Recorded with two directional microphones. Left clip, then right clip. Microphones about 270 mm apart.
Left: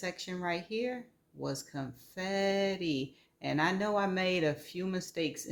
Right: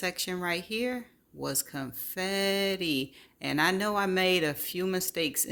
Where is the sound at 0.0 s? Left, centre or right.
Right.